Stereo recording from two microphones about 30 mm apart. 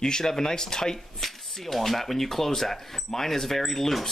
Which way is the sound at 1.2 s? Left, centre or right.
Centre.